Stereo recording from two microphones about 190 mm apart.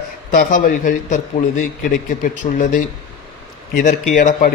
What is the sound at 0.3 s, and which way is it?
A man's voice, 45° left (ahead or behind).